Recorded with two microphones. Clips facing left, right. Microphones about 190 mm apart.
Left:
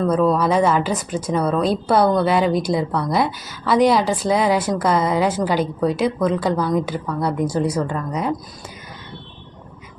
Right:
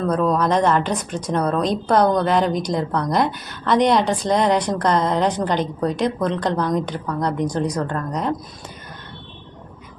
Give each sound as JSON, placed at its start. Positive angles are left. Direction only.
{"t": 0.1, "sound": "speech", "side_deg": 5}